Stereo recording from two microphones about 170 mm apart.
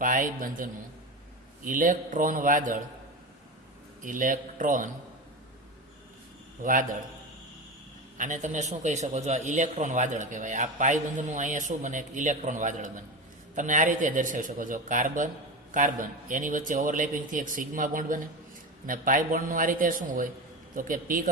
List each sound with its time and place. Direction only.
0.0 s a man's voice: 50° right (ahead or behind)
4.0 s a man's voice: 50° right (ahead or behind)
6.6 s a man's voice: 50° right (ahead or behind)
8.2 s a man's voice: 45° right (ahead or behind)